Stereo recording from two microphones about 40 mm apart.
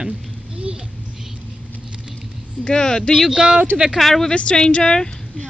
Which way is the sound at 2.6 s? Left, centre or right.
Left.